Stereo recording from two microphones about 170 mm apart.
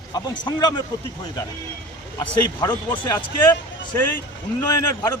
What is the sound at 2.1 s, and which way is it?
A man's voice, 25° left (ahead or behind).